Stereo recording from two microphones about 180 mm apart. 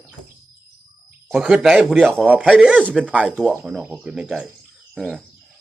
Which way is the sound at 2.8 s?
5° left (ahead or behind).